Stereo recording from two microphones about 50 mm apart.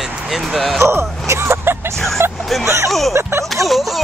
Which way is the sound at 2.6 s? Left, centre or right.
Right.